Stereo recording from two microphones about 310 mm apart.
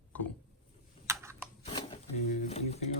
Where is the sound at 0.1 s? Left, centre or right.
Centre.